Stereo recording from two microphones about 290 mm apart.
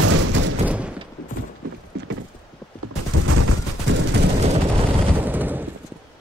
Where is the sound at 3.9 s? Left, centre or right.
Right.